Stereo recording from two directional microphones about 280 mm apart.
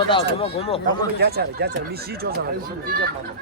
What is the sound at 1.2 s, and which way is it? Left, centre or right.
Speech, right.